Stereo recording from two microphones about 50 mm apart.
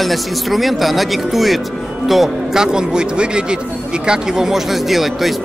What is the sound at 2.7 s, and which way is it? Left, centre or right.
Speech, centre.